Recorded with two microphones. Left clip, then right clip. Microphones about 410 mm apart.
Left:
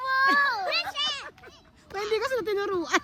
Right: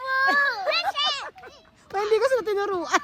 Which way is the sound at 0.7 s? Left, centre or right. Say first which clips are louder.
Right 4 dB; centre.